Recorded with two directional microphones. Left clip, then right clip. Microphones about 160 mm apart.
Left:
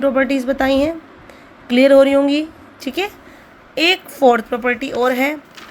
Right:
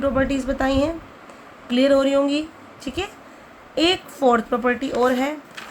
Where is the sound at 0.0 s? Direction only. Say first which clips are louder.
Left 5 dB; 25° left (ahead or behind).